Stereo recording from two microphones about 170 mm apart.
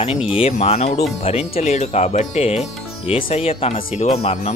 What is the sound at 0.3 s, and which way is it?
Speech, 35° left (ahead or behind).